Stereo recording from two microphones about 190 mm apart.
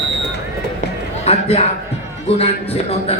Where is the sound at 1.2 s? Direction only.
30° left (ahead or behind).